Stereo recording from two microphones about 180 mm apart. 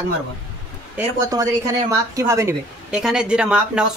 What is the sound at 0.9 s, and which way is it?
Speech, 15° right (ahead or behind).